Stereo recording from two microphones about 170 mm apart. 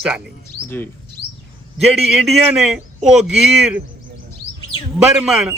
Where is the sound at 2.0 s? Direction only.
Centre (ahead or behind).